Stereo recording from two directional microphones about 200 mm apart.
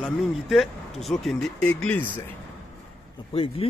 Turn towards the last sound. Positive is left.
turn(degrees=25)  # may be behind; listen again after turning